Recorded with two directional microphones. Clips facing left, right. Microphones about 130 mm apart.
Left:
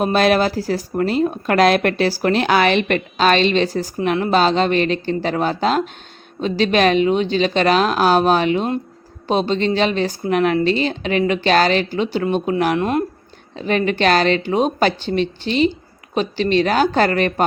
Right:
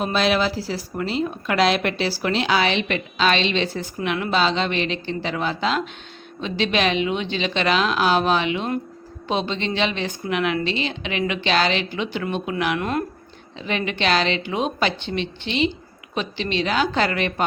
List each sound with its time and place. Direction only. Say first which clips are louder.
0.0 s a woman's voice: left 5 dB; 50° left (ahead or behind)
12.8 s speech: left 5 dB; 25° left (ahead or behind)
13.6 s speech: left 7 dB; 45° left (ahead or behind)